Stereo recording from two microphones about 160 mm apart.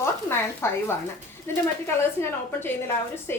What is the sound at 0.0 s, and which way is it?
A woman's voice, 15° left (ahead or behind).